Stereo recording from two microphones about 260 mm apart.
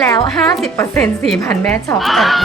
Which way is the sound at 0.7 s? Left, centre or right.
Centre.